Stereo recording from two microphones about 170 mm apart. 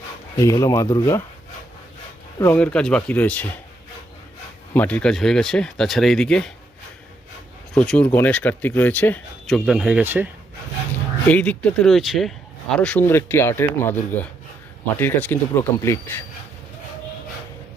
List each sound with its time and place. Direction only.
0.3 s speech: 20° left (ahead or behind)
2.4 s speech: 15° left (ahead or behind)
4.7 s speech: 10° left (ahead or behind)
7.7 s speech: 5° left (ahead or behind)
9.6 s speech: 5° right (ahead or behind)
11.3 s speech: 5° left (ahead or behind)